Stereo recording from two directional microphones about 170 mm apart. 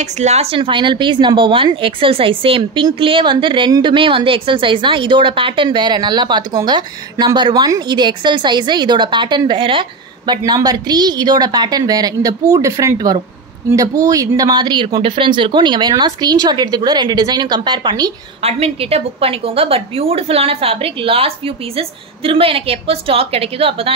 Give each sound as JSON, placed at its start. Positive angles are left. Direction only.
{"t": 0.0, "sound": "speech", "side_deg": -40}
{"t": 18.4, "sound": "a woman's voice", "side_deg": -35}